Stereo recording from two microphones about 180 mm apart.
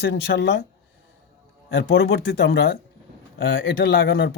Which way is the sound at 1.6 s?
90° left.